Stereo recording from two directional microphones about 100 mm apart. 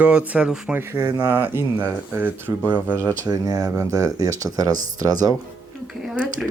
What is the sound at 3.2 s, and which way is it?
Speech, 40° right (ahead or behind).